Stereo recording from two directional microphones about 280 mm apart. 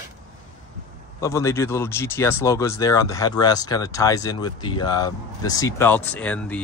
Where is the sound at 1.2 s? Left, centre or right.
Centre.